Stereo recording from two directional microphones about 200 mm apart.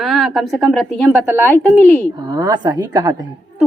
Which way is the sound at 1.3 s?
10° right (ahead or behind).